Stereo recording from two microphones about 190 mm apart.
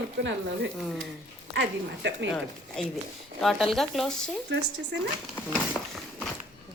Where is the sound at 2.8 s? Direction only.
5° left (ahead or behind).